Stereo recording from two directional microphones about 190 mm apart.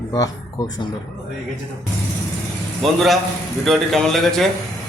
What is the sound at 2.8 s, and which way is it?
A man's voice, centre (ahead or behind).